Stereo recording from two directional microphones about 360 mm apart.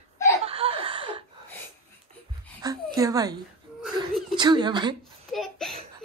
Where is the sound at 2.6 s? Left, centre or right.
Centre.